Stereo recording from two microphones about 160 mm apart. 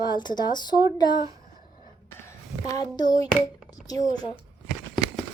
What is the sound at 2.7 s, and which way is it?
Speech, 25° left (ahead or behind).